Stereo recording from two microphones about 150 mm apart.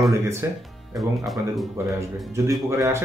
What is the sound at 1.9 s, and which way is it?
Speech, 20° right (ahead or behind).